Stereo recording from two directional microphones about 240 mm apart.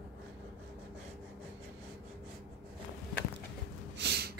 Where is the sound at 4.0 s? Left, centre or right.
Right.